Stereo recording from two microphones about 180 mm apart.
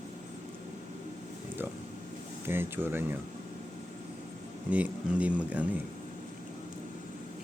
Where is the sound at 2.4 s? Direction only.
10° right (ahead or behind).